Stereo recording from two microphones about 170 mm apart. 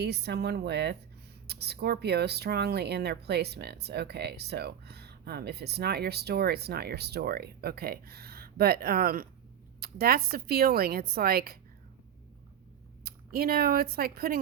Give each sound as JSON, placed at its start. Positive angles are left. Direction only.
{"t": 0.0, "sound": "a woman's voice", "side_deg": -75}
{"t": 13.1, "sound": "speech", "side_deg": -65}